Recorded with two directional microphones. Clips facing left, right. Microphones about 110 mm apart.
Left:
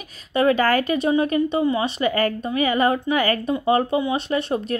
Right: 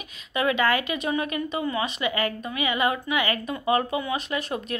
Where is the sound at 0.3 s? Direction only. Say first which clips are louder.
Left 5 dB; 35° left (ahead or behind).